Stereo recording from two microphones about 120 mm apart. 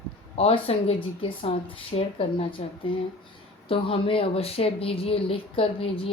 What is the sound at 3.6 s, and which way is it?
Speech, 50° left (ahead or behind).